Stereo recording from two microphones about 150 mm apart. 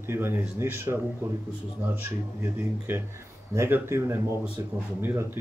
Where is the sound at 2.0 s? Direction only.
15° right (ahead or behind).